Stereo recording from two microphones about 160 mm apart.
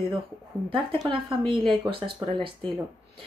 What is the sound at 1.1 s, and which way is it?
Speech, 35° right (ahead or behind).